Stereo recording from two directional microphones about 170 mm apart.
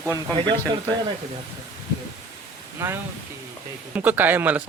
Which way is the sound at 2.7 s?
15° right (ahead or behind).